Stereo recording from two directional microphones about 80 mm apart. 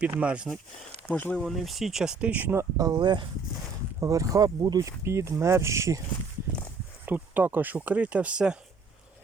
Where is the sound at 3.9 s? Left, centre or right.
Right.